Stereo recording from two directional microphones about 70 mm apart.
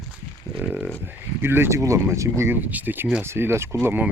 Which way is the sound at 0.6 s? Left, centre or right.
Centre.